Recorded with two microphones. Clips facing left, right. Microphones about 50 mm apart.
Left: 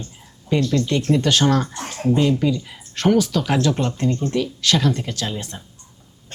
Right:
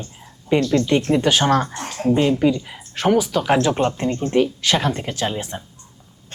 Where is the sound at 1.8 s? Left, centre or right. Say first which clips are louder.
Right 2 dB; centre.